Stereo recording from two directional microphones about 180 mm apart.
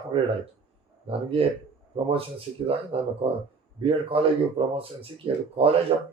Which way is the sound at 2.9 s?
30° right (ahead or behind).